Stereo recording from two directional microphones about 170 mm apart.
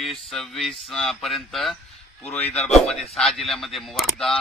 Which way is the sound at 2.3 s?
40° left (ahead or behind).